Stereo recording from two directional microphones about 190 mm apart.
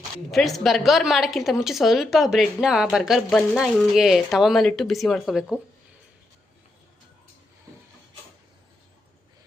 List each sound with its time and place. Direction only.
0.3 s a woman's voice: centre (ahead or behind)